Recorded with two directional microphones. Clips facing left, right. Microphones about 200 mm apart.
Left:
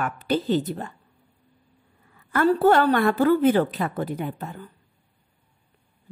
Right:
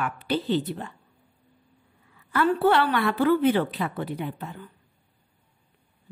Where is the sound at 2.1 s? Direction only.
45° left (ahead or behind).